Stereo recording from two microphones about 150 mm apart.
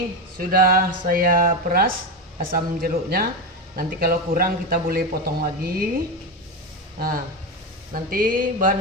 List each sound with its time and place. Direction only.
0.3 s a man's voice: 75° right (ahead or behind)
7.9 s speech: 70° right (ahead or behind)